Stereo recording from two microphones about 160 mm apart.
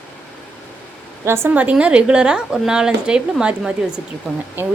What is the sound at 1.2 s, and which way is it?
A woman's voice, 15° right (ahead or behind).